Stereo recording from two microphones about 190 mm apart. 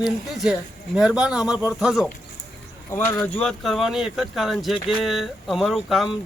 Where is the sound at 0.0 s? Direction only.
Centre (ahead or behind).